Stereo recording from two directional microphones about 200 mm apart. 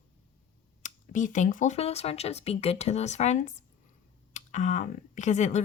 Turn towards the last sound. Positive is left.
turn(degrees=35)  # may be behind; listen again after turning